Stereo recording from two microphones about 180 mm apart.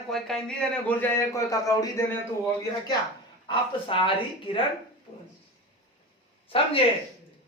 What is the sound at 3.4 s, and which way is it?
Speech, 30° left (ahead or behind).